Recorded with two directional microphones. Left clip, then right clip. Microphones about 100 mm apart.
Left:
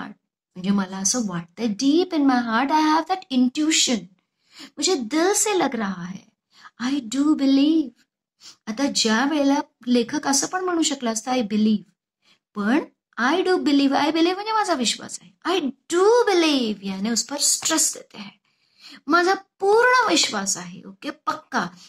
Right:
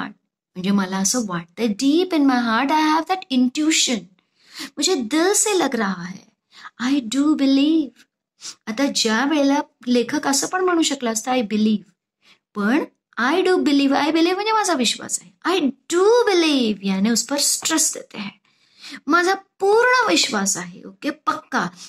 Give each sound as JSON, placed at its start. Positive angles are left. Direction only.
{"t": 0.0, "sound": "a woman's voice", "side_deg": 25}